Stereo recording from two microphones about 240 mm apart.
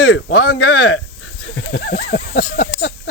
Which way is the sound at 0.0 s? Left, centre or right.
Left.